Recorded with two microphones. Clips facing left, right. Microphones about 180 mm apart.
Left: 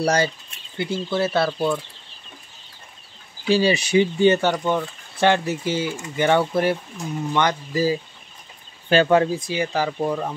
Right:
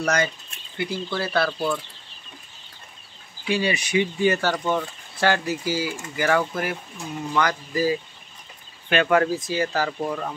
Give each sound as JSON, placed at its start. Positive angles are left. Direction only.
{"t": 0.0, "sound": "speech", "side_deg": 30}
{"t": 3.4, "sound": "speech", "side_deg": 30}